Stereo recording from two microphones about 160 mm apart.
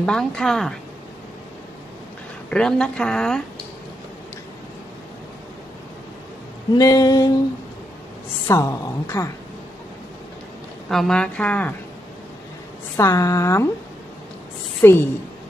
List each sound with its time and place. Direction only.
0.0 s a woman's voice: 5° left (ahead or behind)
2.5 s a woman's voice: 5° left (ahead or behind)
6.7 s a sound: 20° left (ahead or behind)
8.5 s a woman's voice: 15° left (ahead or behind)
10.9 s a woman's voice: centre (ahead or behind)
12.9 s a woman's voice: 20° left (ahead or behind)
14.8 s a woman's voice: 15° left (ahead or behind)